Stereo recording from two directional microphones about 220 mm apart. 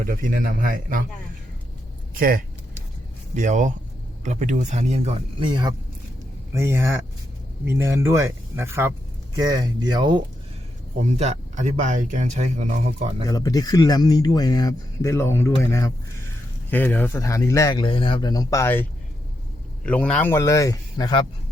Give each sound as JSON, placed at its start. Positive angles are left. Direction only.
{"t": 0.0, "sound": "speech", "side_deg": -40}
{"t": 2.1, "sound": "speech", "side_deg": -40}
{"t": 11.0, "sound": "speech", "side_deg": -35}
{"t": 13.2, "sound": "speech", "side_deg": 15}
{"t": 16.6, "sound": "speech", "side_deg": 10}